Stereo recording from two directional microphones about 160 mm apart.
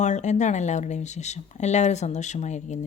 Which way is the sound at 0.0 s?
45° left (ahead or behind).